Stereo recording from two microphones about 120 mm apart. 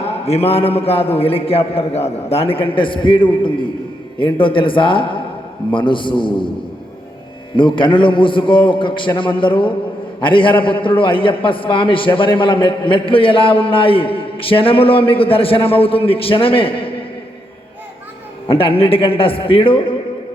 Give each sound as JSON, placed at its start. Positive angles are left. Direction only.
{"t": 0.3, "sound": "a man's voice", "side_deg": 55}
{"t": 7.5, "sound": "a man's voice", "side_deg": 45}
{"t": 18.4, "sound": "a man's voice", "side_deg": 50}